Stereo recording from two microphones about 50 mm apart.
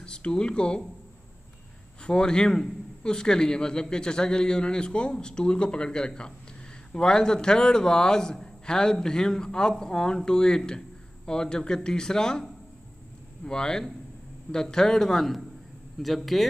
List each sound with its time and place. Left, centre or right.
0.0 s speech: centre
2.0 s a man's voice: centre
13.5 s a man's voice: centre